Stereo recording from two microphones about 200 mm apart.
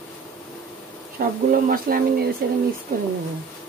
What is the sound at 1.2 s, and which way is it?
A woman's voice, 45° right (ahead or behind).